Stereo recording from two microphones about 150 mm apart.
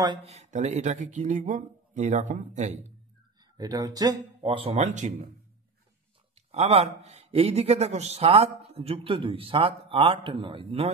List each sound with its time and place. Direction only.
0.3 s speech: 50° right (ahead or behind)
3.5 s speech: 25° right (ahead or behind)
4.4 s speech: 40° right (ahead or behind)
6.3 s speech: 45° right (ahead or behind)